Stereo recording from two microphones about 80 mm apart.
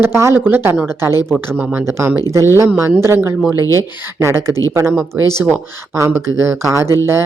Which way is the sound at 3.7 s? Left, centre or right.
Right.